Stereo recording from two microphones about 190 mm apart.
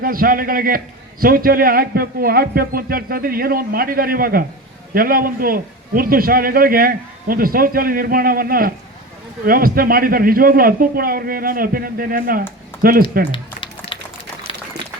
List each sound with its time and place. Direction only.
0.0 s a man's voice: 50° right (ahead or behind)
13.3 s a sound: 25° left (ahead or behind)
14.5 s boiling: 30° left (ahead or behind)